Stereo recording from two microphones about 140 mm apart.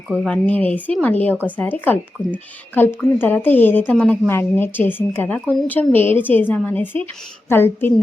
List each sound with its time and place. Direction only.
0.3 s a woman's voice: 10° left (ahead or behind)